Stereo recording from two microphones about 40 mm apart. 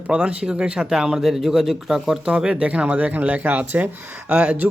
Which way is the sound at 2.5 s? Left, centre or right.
Right.